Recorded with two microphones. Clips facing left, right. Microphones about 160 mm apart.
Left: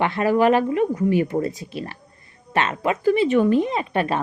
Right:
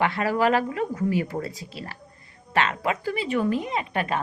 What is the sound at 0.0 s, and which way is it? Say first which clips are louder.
A woman's voice: left 4 dB; 25° left (ahead or behind).